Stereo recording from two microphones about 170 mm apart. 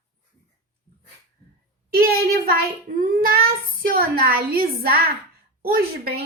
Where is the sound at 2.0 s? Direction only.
60° right (ahead or behind).